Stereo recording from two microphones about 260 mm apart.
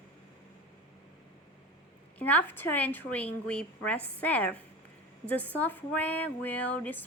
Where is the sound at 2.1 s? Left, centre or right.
Centre.